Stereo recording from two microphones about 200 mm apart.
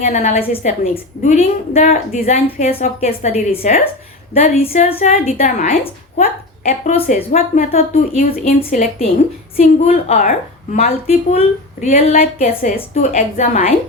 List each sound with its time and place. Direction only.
0.0 s a woman's voice: 35° left (ahead or behind)